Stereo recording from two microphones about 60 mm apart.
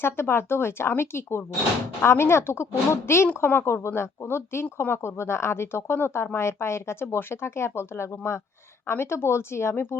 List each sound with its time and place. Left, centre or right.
0.0 s speech: left